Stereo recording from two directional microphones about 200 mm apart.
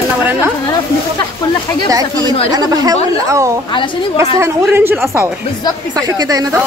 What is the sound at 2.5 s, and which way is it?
Speech, 20° right (ahead or behind).